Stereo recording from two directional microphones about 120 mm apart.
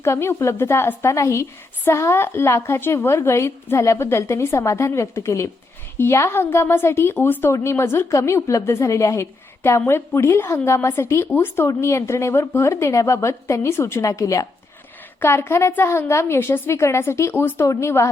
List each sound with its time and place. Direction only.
0.0 s a woman's voice: 20° left (ahead or behind)